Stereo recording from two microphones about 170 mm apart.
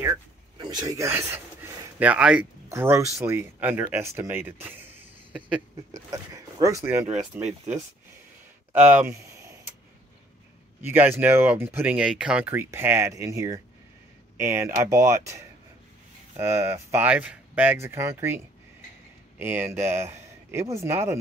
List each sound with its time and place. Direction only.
0.7 s speech: 25° right (ahead or behind)
5.9 s speech: 20° right (ahead or behind)
8.7 s speech: 45° right (ahead or behind)
9.0 s a sound: 15° right (ahead or behind)
10.8 s speech: 10° right (ahead or behind)